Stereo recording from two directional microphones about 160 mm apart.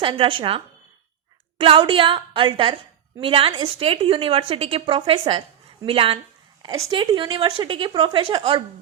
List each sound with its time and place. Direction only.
0.0 s a woman's voice: 35° right (ahead or behind)